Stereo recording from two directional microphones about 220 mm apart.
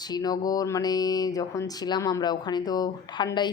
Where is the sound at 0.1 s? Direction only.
15° left (ahead or behind).